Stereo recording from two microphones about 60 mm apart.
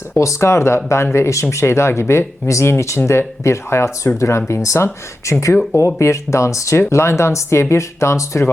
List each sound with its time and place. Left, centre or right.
0.2 s speech: left
6.7 s speech: left